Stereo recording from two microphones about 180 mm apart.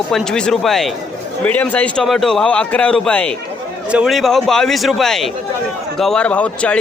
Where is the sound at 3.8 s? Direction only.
5° right (ahead or behind).